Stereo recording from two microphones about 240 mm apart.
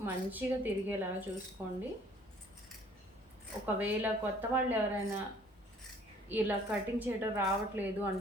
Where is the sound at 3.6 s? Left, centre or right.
Centre.